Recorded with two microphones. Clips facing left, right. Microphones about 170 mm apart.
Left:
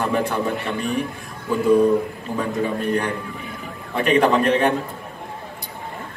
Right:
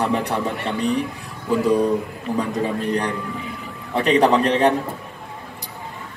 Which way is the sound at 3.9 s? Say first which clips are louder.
Right 1 dB; 30° right (ahead or behind).